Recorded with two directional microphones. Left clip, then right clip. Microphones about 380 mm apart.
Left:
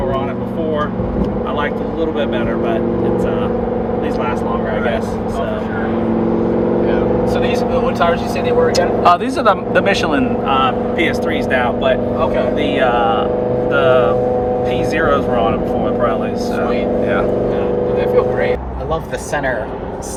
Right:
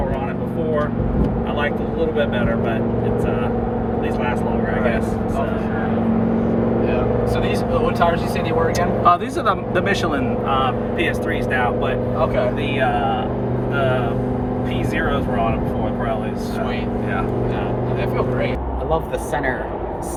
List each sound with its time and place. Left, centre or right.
9.0 s speech: left
12.8 s speech: left